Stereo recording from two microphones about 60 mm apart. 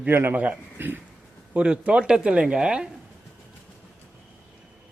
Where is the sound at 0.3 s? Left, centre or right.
Right.